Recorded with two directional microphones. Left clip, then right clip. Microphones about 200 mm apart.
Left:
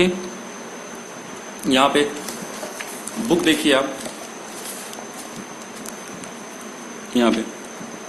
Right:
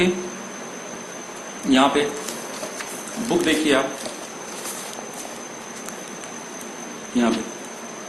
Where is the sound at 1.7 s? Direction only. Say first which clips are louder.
Left 1 dB; 55° left (ahead or behind).